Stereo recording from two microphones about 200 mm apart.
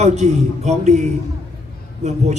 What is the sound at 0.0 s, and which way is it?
A man's voice, 35° right (ahead or behind).